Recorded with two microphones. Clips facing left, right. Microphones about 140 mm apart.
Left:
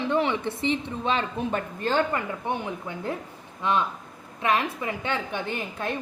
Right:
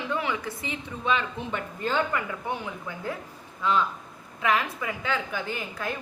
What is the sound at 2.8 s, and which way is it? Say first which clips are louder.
A woman's voice: left 2 dB; 25° left (ahead or behind).